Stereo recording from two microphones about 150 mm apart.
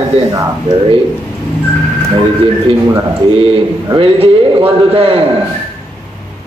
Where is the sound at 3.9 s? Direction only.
35° right (ahead or behind).